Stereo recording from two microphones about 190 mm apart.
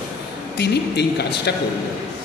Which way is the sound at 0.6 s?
60° left (ahead or behind).